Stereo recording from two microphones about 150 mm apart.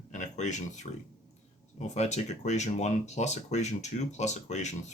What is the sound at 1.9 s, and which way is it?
Speech, 50° left (ahead or behind).